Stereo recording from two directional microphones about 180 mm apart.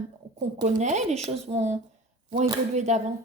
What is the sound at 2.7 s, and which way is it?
Speech, 40° right (ahead or behind).